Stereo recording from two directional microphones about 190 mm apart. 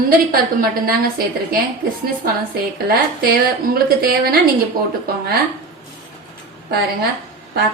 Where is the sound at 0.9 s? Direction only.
50° right (ahead or behind).